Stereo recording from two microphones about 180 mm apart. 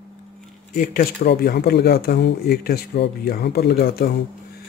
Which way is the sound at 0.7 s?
55° left (ahead or behind).